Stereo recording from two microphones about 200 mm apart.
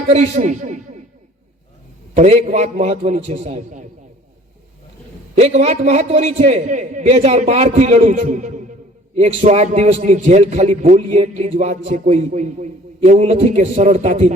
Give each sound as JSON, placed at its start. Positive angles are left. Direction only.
{"t": 0.1, "sound": "a man's voice", "side_deg": -35}
{"t": 2.1, "sound": "a man's voice", "side_deg": -35}
{"t": 5.3, "sound": "a man's voice", "side_deg": -35}